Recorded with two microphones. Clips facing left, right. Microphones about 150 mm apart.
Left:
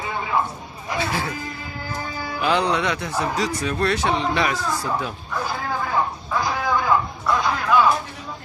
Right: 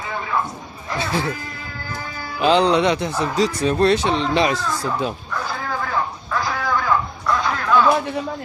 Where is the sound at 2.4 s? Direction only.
25° right (ahead or behind).